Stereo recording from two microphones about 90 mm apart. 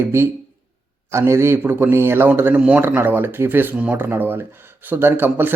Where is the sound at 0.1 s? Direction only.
25° right (ahead or behind).